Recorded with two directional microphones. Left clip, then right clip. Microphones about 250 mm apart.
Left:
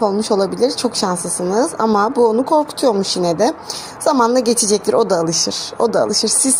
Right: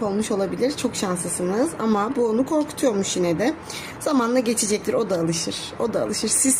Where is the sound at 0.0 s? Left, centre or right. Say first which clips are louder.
Left 8 dB; centre.